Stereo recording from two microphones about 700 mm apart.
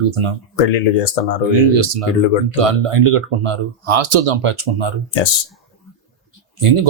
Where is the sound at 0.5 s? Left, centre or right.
Left.